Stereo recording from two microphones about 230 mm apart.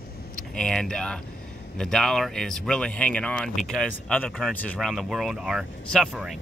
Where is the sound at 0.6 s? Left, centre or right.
Centre.